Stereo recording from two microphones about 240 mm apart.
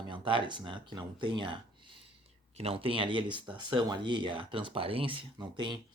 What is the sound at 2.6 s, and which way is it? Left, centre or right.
Speech, right.